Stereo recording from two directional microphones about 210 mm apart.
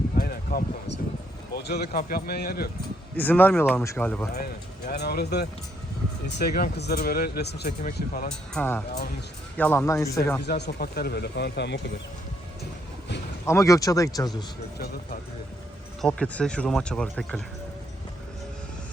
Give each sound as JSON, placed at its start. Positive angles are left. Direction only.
{"t": 0.2, "sound": "a sound", "side_deg": 50}
{"t": 1.5, "sound": "speech", "side_deg": 50}
{"t": 3.2, "sound": "speech", "side_deg": 10}
{"t": 4.9, "sound": "speech", "side_deg": 50}
{"t": 8.3, "sound": "speech", "side_deg": 5}
{"t": 8.9, "sound": "speech", "side_deg": 45}
{"t": 9.6, "sound": "speech", "side_deg": 10}
{"t": 10.4, "sound": "speech", "side_deg": 50}
{"t": 13.4, "sound": "speech", "side_deg": 15}
{"t": 16.0, "sound": "speech", "side_deg": 5}